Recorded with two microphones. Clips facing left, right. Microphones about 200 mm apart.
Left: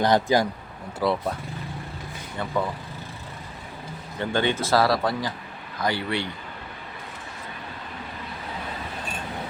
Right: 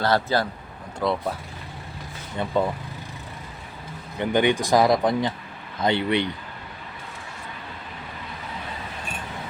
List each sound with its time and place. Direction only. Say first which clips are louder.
0.0 s speech: left 2 dB; 15° left (ahead or behind)
0.9 s speech: left 1 dB; centre (ahead or behind)
2.4 s speech: right 3 dB; 20° right (ahead or behind)
4.2 s speech: right 4 dB; 15° right (ahead or behind)